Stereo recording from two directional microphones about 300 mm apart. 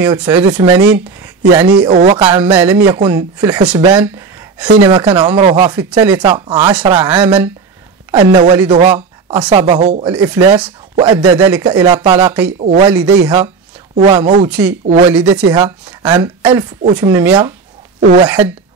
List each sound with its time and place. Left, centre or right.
0.0 s a woman's voice: centre
1.9 s speech: right
2.5 s a woman's voice: centre
15.0 s a woman's voice: centre
18.0 s speech: right